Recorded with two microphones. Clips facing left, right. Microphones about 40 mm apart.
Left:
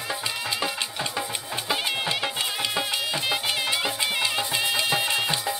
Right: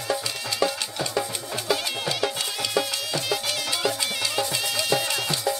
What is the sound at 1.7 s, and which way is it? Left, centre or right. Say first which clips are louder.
Music: even; left.